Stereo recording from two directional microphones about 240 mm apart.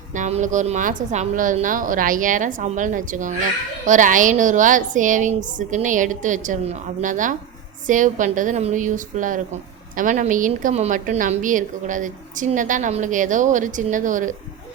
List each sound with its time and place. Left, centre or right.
0.1 s a woman's voice: right